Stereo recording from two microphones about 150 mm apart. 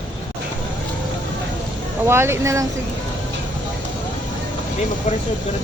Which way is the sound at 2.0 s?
15° right (ahead or behind).